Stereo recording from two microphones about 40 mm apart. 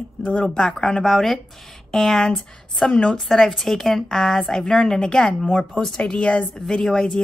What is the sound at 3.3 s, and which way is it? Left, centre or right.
A woman's voice, centre.